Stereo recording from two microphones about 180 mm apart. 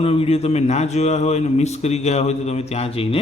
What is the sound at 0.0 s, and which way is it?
A man's voice, 30° left (ahead or behind).